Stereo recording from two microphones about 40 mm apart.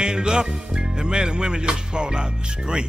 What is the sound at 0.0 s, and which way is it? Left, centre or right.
Music, centre.